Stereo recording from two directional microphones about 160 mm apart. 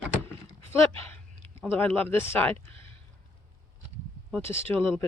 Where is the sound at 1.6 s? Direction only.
10° left (ahead or behind).